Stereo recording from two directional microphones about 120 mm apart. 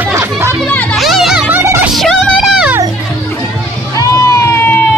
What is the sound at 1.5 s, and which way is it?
Music, 20° right (ahead or behind).